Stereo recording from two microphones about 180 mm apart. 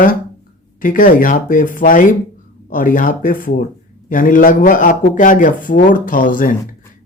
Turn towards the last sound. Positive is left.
turn(degrees=50)  # may be behind; listen again after turning